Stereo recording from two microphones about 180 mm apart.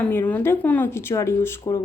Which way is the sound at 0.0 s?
10° left (ahead or behind).